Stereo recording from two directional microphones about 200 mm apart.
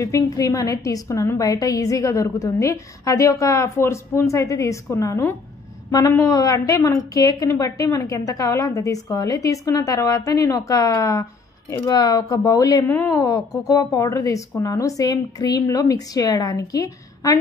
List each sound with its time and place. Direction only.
0.0 s speech: 15° left (ahead or behind)